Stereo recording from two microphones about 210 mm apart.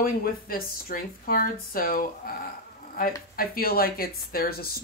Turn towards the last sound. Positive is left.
turn(degrees=45)  # may be behind; listen again after turning